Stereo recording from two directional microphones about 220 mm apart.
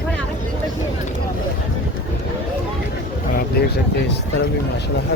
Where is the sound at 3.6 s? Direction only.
45° left (ahead or behind).